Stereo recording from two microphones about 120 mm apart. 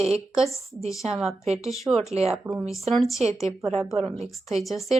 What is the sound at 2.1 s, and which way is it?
Speech, 60° right (ahead or behind).